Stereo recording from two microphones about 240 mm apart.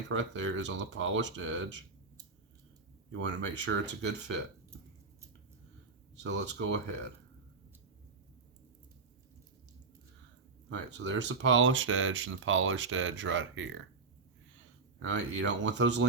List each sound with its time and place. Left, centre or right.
0.1 s speech: right
3.1 s speech: right
6.1 s speech: right
10.9 s speech: right
14.9 s speech: right